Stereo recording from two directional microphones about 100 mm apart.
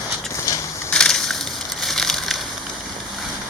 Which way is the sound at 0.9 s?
5° left (ahead or behind).